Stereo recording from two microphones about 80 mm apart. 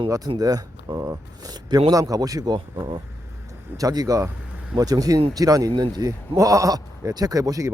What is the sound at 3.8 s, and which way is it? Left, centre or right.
Speech, right.